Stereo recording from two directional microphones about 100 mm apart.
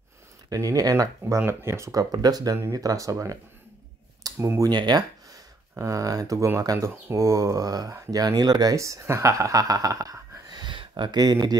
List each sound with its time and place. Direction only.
0.5 s speech: 35° right (ahead or behind)
4.7 s speech: 45° right (ahead or behind)